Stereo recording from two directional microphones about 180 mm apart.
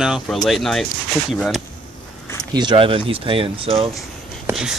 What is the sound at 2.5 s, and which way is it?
Speech, 25° right (ahead or behind).